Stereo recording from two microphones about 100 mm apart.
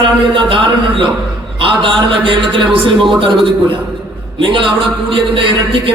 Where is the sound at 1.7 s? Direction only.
60° right (ahead or behind).